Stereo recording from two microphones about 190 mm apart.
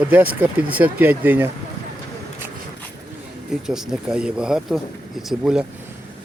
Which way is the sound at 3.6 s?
5° right (ahead or behind).